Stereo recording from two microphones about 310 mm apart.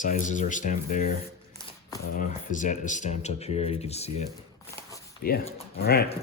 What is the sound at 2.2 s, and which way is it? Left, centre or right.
Speech, left.